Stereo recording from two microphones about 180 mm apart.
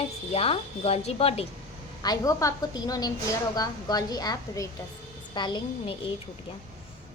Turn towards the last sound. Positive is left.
turn(degrees=25)  # may be behind; listen again after turning